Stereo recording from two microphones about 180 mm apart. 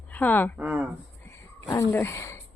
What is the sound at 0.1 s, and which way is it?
Speech, 10° left (ahead or behind).